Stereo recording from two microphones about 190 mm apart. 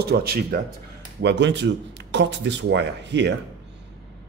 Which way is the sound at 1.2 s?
65° right (ahead or behind).